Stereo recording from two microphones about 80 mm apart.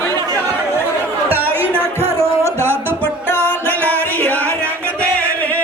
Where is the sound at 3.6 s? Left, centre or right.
Left.